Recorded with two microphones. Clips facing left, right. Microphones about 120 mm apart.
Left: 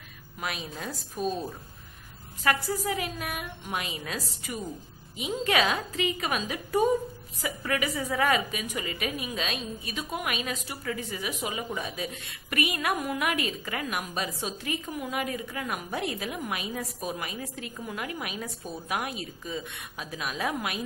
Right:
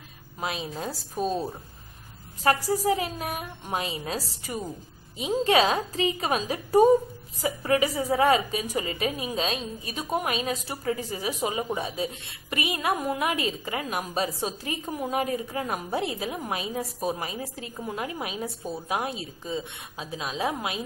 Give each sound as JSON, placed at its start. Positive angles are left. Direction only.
{"t": 0.4, "sound": "a woman's voice", "side_deg": -30}